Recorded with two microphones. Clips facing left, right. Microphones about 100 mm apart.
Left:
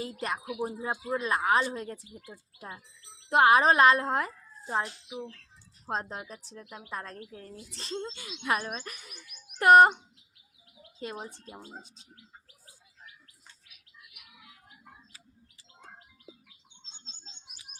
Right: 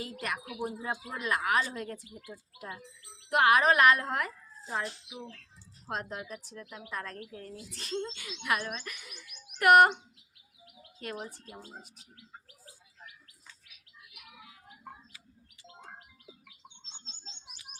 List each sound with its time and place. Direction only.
0.0 s a woman's voice: 30° left (ahead or behind)
8.7 s speech: 40° left (ahead or behind)
9.6 s a woman's voice: 30° left (ahead or behind)
11.0 s a woman's voice: 20° left (ahead or behind)